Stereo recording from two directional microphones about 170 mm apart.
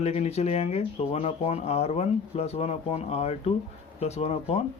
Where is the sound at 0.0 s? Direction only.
40° left (ahead or behind).